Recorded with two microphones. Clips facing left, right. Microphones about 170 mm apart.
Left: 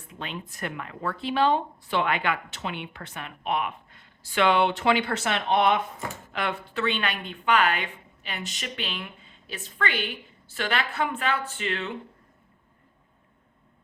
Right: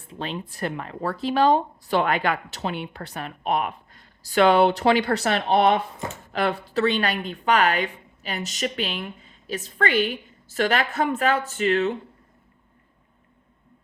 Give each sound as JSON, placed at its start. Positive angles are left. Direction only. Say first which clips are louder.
{"t": 0.0, "sound": "speech", "louder": "right 5 dB", "side_deg": -35}